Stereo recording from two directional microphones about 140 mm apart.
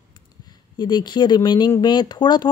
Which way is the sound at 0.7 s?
30° left (ahead or behind).